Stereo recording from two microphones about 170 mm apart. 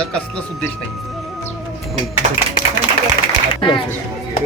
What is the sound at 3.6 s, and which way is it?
Speech, 30° left (ahead or behind).